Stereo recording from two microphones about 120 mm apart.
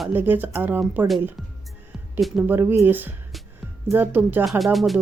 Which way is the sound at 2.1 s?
Centre (ahead or behind).